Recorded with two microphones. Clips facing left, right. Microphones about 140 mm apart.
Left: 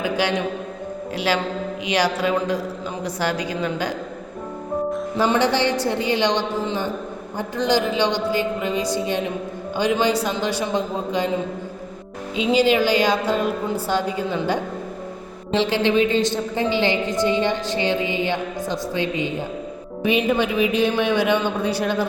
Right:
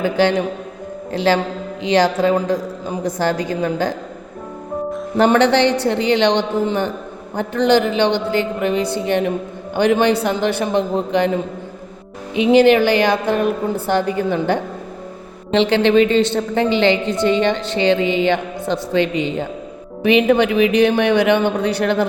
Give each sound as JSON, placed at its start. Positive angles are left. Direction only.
{"t": 0.0, "sound": "a woman's voice", "side_deg": -50}
{"t": 2.0, "sound": "a woman's voice", "side_deg": -45}
{"t": 5.1, "sound": "a woman's voice", "side_deg": -65}
{"t": 12.4, "sound": "a woman's voice", "side_deg": -60}